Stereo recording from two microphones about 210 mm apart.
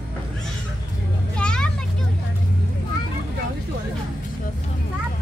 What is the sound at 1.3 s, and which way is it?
Children playing, 5° left (ahead or behind).